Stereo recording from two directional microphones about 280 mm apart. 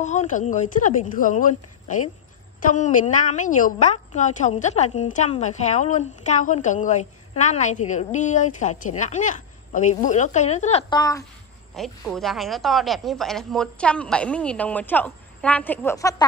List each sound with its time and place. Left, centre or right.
0.0 s a woman's voice: left
11.7 s a woman's voice: centre